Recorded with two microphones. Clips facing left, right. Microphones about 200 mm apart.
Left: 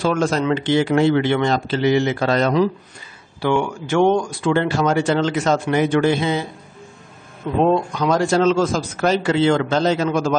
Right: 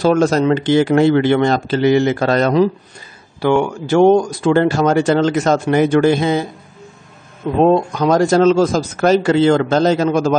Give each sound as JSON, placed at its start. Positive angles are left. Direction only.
{"t": 0.0, "sound": "speech", "side_deg": -40}
{"t": 3.8, "sound": "speech", "side_deg": -35}
{"t": 7.6, "sound": "speech", "side_deg": -45}